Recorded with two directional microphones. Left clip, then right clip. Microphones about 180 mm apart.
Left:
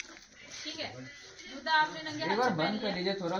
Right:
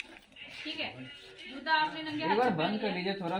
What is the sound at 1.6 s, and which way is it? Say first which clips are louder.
Speech: left 1 dB; 10° right (ahead or behind).